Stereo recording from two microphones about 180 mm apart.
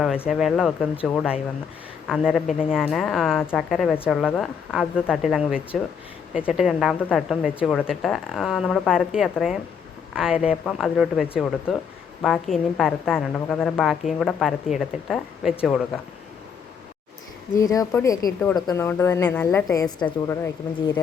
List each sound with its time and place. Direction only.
0.3 s a woman's voice: centre (ahead or behind)
3.9 s a woman's voice: 10° left (ahead or behind)
4.2 s a woman's voice: centre (ahead or behind)
17.6 s a woman's voice: 20° left (ahead or behind)